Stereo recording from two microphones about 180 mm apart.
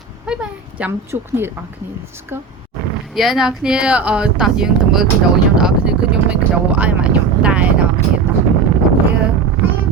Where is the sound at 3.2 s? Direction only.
Centre (ahead or behind).